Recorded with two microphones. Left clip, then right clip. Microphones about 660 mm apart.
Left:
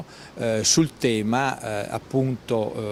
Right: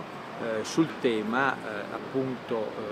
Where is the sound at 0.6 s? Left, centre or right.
Left.